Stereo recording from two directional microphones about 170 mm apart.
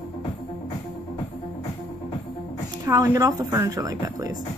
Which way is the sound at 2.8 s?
20° right (ahead or behind).